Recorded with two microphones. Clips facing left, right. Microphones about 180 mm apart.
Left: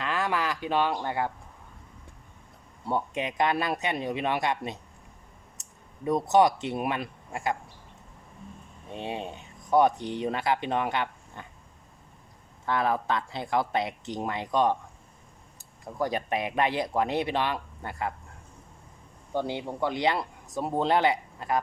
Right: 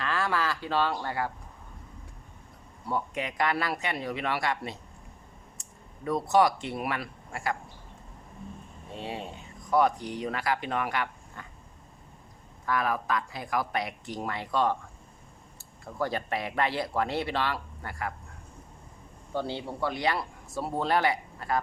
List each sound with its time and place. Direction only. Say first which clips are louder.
0.0 s speech: left 1 dB; 20° left (ahead or behind)
2.8 s speech: left 2 dB; 25° left (ahead or behind)
6.1 s speech: left 2 dB; 20° left (ahead or behind)
8.9 s speech: left 3 dB; 20° left (ahead or behind)
12.6 s speech: left 2 dB; 25° left (ahead or behind)
19.3 s speech: left 2 dB; 15° left (ahead or behind)